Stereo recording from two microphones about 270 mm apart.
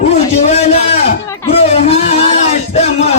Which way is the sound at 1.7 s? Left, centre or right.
Left.